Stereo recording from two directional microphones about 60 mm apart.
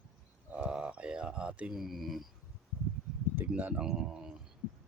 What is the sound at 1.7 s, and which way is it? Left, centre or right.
Speech, centre.